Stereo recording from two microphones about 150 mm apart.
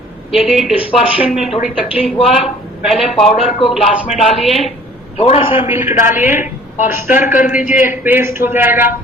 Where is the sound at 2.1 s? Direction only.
5° left (ahead or behind).